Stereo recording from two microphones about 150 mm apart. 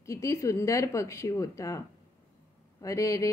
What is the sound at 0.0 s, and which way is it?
Speech, 20° left (ahead or behind).